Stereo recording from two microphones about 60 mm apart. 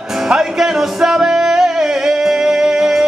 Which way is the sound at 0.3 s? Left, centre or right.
Centre.